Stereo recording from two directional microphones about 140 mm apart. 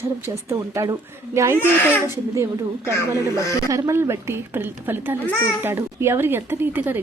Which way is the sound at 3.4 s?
20° left (ahead or behind).